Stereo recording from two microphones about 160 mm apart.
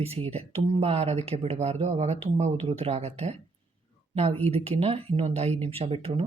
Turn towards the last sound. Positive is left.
turn(degrees=-40)  # may be behind; listen again after turning